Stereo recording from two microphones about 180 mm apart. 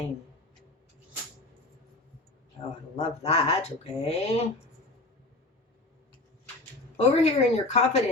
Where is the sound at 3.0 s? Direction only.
35° left (ahead or behind).